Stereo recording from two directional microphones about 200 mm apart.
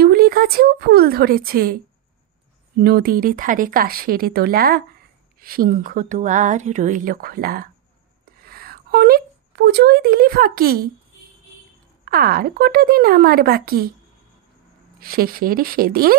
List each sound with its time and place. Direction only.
0.0 s speech: 50° right (ahead or behind)
2.8 s speech: 50° right (ahead or behind)
12.0 s speech: 50° right (ahead or behind)
15.0 s speech: 45° right (ahead or behind)